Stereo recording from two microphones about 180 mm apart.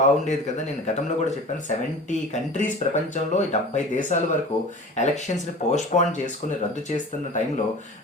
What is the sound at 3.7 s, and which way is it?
Speech, 45° left (ahead or behind).